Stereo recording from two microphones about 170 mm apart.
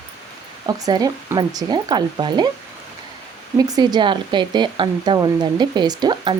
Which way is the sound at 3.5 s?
20° right (ahead or behind).